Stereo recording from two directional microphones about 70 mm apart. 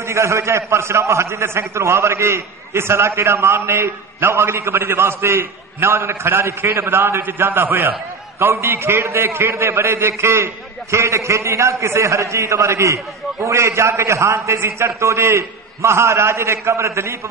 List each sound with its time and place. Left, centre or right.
0.0 s a man's voice: right